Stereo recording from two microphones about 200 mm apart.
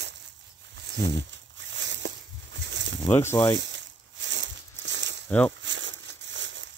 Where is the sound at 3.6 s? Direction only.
60° right (ahead or behind).